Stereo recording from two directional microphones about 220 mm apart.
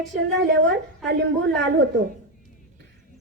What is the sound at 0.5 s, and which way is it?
A woman's voice, 55° right (ahead or behind).